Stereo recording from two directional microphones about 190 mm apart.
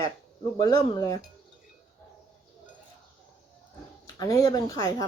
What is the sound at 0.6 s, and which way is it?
Speech, 20° left (ahead or behind).